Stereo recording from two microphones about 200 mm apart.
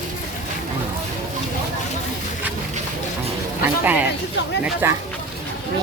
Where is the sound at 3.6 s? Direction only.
10° right (ahead or behind).